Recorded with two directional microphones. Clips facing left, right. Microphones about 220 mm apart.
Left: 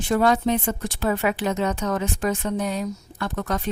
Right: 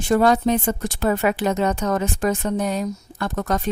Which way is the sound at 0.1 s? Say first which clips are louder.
Right 3 dB; 40° right (ahead or behind).